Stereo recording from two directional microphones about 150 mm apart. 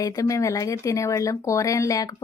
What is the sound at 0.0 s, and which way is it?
Speech, 20° left (ahead or behind).